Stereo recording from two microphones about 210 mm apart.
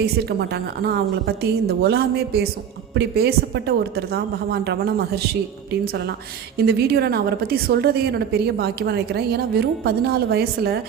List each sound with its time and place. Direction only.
0.0 s a woman's voice: 50° right (ahead or behind)